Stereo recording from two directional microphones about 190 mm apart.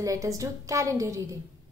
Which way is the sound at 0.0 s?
20° right (ahead or behind).